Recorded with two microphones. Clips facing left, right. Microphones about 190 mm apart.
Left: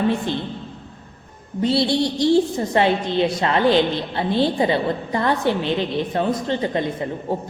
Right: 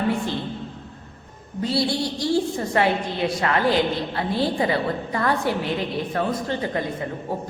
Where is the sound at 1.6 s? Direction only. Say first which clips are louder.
Left 5 dB; 25° left (ahead or behind).